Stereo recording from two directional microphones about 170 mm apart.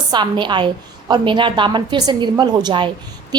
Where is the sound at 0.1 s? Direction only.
25° right (ahead or behind).